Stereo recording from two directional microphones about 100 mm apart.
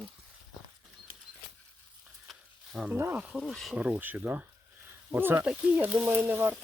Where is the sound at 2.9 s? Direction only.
20° right (ahead or behind).